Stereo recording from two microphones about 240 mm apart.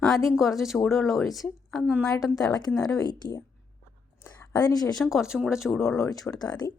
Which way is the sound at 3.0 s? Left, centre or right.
Centre.